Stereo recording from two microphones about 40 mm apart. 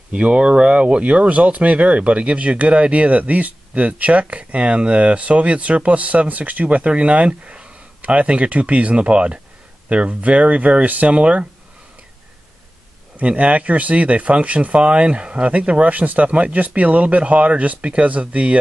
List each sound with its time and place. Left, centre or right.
0.1 s speech: right
13.4 s speech: right